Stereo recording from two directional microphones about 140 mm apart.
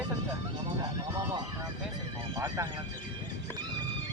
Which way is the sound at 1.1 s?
25° right (ahead or behind).